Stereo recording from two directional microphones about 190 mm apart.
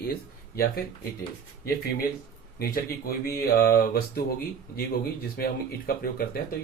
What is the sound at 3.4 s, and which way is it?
Speech, 50° left (ahead or behind).